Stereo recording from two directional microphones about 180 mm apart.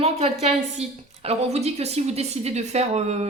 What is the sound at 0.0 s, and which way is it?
Speech, 35° right (ahead or behind).